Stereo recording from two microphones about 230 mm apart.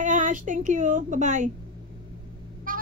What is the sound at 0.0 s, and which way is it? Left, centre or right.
A woman's voice, right.